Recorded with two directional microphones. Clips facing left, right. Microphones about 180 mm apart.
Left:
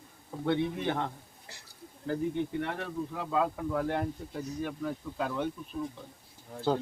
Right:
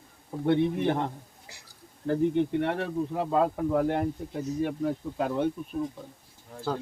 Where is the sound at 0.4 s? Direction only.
45° right (ahead or behind).